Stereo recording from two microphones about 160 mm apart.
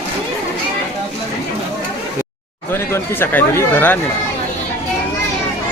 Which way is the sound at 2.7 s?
15° left (ahead or behind).